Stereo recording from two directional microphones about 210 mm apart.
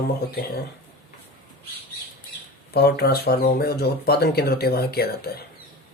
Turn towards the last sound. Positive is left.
turn(degrees=50)  # may be behind; listen again after turning